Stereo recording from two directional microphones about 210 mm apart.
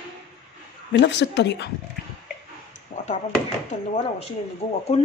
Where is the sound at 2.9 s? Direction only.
45° left (ahead or behind).